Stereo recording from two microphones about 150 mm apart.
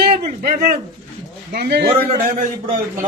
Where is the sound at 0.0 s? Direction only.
90° right.